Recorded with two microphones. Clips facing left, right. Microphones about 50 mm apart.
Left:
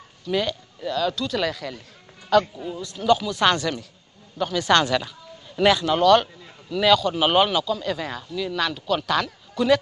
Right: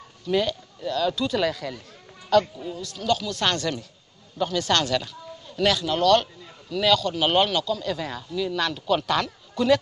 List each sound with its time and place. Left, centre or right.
0.2 s speech: centre